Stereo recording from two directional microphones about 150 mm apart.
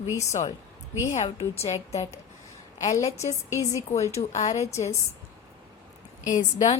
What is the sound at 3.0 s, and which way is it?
Speech, 20° left (ahead or behind).